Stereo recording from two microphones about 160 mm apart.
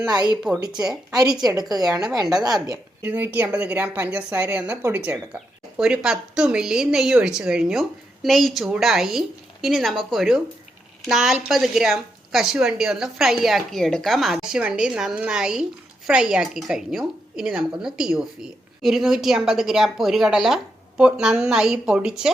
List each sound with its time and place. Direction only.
0.0 s a woman's voice: 25° right (ahead or behind)
1.4 s a woman's voice: 25° right (ahead or behind)
3.1 s a woman's voice: 10° right (ahead or behind)